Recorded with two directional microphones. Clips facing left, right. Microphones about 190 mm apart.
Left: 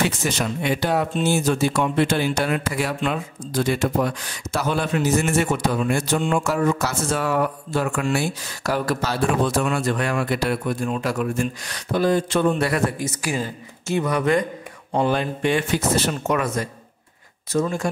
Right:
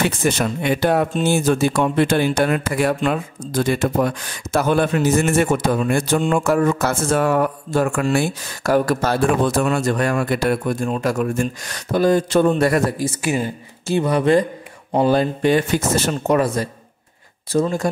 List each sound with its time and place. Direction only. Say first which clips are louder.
0.0 s speech: right 4 dB; 55° right (ahead or behind); by 17.8 s 35° right (ahead or behind)